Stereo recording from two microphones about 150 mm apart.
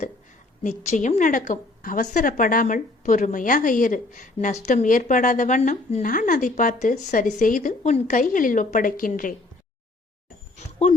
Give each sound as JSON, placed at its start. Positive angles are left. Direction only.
{"t": 0.6, "sound": "a woman's voice", "side_deg": 55}